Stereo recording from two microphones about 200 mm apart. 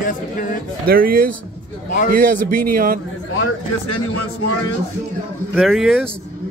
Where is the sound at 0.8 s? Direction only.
45° right (ahead or behind).